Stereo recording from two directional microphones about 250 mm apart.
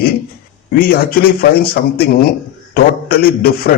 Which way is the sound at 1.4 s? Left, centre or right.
Left.